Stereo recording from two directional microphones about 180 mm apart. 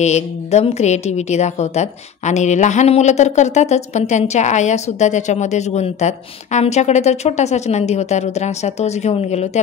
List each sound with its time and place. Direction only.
0.0 s a woman's voice: 40° left (ahead or behind)